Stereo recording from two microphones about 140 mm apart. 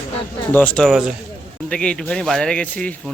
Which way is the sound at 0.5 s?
10° left (ahead or behind).